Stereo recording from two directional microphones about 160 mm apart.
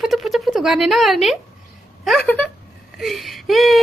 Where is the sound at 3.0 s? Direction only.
Centre (ahead or behind).